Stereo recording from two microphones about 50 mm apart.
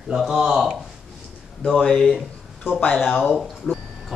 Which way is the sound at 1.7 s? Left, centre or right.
Centre.